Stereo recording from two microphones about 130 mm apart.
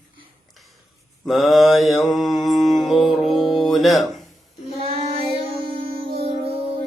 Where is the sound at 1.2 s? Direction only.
Centre (ahead or behind).